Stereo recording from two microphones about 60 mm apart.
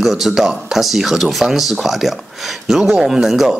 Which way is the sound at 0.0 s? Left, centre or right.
Centre.